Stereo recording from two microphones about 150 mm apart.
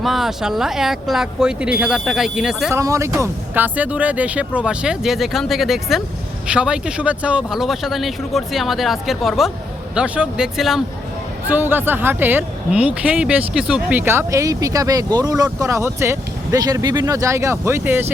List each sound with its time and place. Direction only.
0.0 s speech: centre (ahead or behind)
2.7 s speech: 20° right (ahead or behind)